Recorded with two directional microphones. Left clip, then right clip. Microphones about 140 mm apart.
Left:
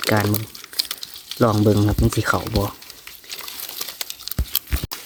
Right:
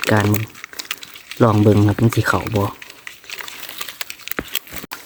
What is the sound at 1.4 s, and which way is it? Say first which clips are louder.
Speech: right 3 dB; 45° right (ahead or behind).